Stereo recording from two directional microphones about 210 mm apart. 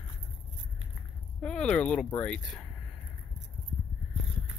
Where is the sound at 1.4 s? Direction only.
5° left (ahead or behind).